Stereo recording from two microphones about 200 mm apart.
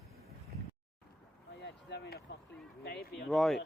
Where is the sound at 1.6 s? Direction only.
60° left (ahead or behind).